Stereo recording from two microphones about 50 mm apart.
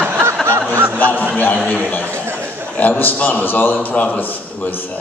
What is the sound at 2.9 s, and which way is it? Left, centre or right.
A man's voice, left.